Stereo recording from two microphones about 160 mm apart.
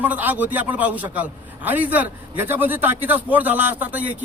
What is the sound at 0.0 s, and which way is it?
A man's voice, 10° right (ahead or behind).